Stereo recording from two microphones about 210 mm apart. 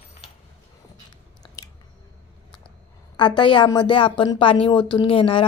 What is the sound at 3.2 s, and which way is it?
A woman's voice, 20° left (ahead or behind).